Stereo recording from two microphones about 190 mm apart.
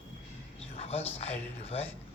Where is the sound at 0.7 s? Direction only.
30° left (ahead or behind).